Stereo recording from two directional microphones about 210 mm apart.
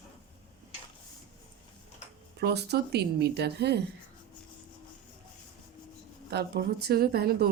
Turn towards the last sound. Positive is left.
turn(degrees=-50)  # may be behind; listen again after turning